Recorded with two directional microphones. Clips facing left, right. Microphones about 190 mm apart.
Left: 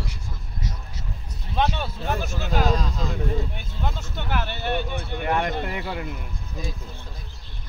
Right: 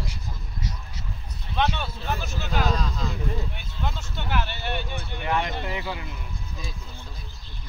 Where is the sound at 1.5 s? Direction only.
40° left (ahead or behind).